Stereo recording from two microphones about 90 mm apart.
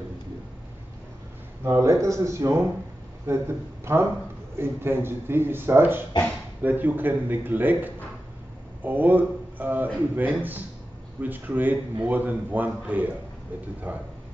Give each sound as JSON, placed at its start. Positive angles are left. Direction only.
{"t": 1.6, "sound": "a man's voice", "side_deg": -30}